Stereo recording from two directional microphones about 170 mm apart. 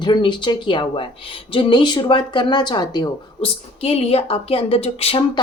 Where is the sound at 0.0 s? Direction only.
25° left (ahead or behind).